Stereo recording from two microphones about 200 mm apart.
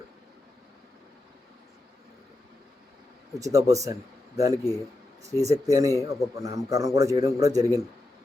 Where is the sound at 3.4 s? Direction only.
15° right (ahead or behind).